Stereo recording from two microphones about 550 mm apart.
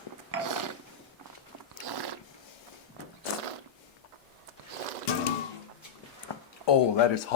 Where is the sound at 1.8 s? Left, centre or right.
Right.